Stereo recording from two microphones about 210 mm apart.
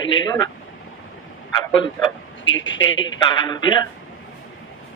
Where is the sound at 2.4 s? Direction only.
65° left (ahead or behind).